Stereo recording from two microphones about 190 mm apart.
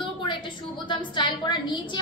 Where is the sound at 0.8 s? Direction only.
25° left (ahead or behind).